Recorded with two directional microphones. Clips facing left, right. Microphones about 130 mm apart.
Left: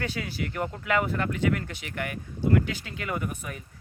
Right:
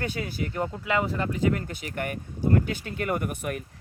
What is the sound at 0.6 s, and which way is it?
Speech, 25° right (ahead or behind).